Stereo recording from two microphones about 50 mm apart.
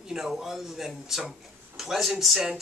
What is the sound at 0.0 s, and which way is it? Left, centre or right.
Speech, centre.